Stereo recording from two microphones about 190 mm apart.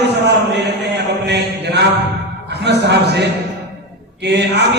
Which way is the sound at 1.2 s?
60° right (ahead or behind).